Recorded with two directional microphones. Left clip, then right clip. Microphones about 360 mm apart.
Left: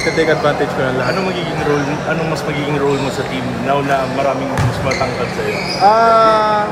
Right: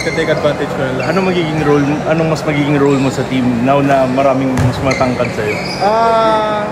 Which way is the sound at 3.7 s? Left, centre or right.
Right.